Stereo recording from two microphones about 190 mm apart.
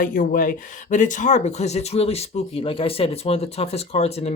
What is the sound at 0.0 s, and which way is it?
Speech, 50° left (ahead or behind).